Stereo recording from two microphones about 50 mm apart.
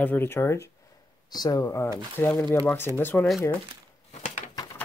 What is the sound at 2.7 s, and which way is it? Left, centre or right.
Speech, left.